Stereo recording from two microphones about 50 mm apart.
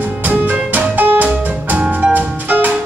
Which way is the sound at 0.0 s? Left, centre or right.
Right.